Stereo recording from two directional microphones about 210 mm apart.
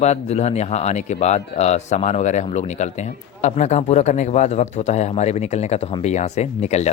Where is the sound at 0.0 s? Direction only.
30° left (ahead or behind).